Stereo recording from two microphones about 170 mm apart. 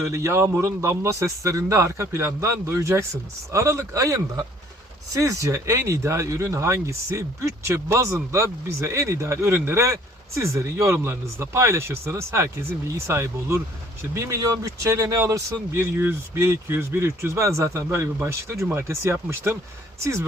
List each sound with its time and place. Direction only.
0.0 s speech: 15° right (ahead or behind)